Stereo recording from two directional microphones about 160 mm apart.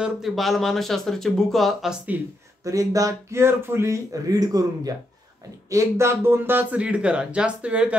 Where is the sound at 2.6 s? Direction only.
20° right (ahead or behind).